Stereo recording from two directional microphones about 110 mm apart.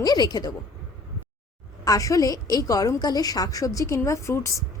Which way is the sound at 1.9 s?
30° left (ahead or behind).